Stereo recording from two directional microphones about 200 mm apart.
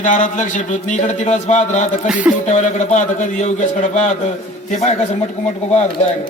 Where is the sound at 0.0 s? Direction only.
40° left (ahead or behind).